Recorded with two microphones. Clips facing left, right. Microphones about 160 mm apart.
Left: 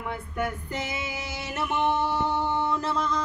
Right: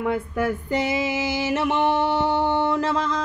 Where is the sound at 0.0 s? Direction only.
90° right.